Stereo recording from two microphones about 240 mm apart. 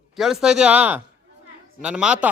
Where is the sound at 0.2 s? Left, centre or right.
Centre.